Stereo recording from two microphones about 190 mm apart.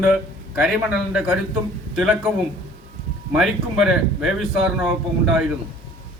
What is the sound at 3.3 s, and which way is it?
Speech, 5° right (ahead or behind).